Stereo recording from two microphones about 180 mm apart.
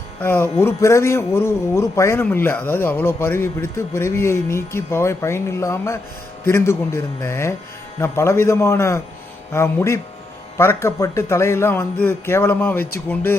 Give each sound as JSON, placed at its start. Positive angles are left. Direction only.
{"t": 0.2, "sound": "a man's voice", "side_deg": 10}